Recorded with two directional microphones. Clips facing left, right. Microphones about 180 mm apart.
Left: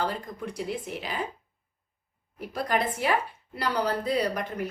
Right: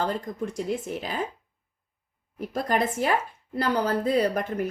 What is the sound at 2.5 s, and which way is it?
Speech, 45° right (ahead or behind).